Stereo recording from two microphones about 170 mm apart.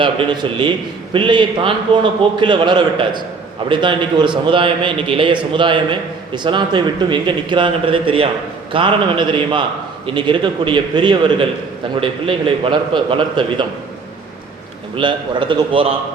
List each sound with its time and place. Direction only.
0.0 s a man's voice: 30° right (ahead or behind)
14.9 s a man's voice: 30° right (ahead or behind)